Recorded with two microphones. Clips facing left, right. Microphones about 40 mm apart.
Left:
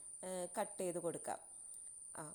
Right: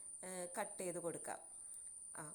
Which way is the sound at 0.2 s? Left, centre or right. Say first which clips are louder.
Left 4 dB; left.